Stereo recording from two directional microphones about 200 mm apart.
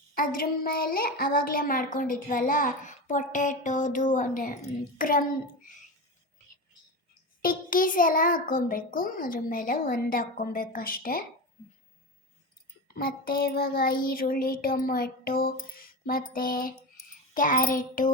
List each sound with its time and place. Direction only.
0.2 s speech: 45° left (ahead or behind)
7.4 s speech: 45° left (ahead or behind)
12.9 s speech: 50° left (ahead or behind)